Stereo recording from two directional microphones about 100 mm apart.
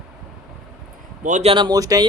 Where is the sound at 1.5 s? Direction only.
40° right (ahead or behind).